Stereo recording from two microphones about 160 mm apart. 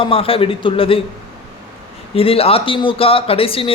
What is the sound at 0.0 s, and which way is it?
Speech, 35° left (ahead or behind).